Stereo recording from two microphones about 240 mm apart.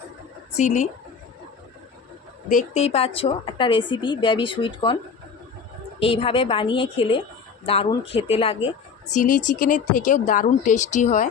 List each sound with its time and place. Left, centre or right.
0.5 s a woman's voice: left
2.5 s a woman's voice: left
6.0 s a woman's voice: left